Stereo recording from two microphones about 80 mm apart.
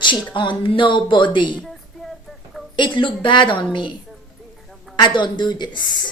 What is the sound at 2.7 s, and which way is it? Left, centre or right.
Speech, left.